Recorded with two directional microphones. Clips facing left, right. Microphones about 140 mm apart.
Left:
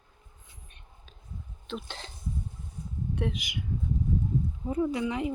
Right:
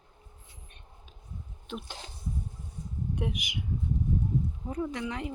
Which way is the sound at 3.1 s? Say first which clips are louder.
Left 2 dB; 15° right (ahead or behind).